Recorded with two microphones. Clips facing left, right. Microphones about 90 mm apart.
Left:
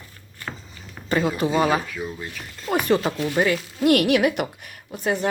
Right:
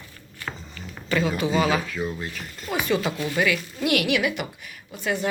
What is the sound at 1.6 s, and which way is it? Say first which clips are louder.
Speech: left 2 dB; 45° left (ahead or behind).